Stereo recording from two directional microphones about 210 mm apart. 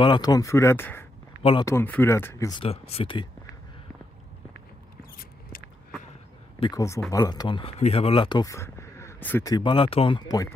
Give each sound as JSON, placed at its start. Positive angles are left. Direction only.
{"t": 0.0, "sound": "speech", "side_deg": 20}
{"t": 1.4, "sound": "speech", "side_deg": 25}
{"t": 1.7, "sound": "speech", "side_deg": 10}
{"t": 6.6, "sound": "speech", "side_deg": 15}